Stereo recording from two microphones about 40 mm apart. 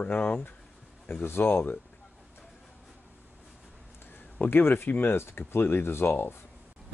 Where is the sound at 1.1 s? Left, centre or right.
Left.